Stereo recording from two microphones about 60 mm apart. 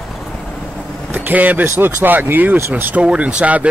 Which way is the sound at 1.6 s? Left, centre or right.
Right.